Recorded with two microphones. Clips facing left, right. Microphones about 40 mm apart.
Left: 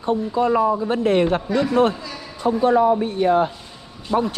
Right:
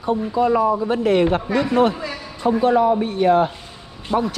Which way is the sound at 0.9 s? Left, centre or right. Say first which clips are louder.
Right 1 dB; right.